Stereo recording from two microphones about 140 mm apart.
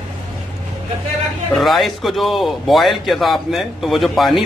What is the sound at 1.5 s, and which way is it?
Speech, centre (ahead or behind).